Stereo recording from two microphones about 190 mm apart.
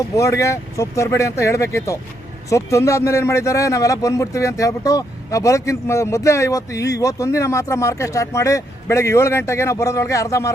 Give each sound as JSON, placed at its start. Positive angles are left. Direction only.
{"t": 0.2, "sound": "speech", "side_deg": 15}